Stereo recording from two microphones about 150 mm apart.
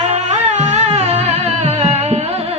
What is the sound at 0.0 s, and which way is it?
Music, 45° right (ahead or behind).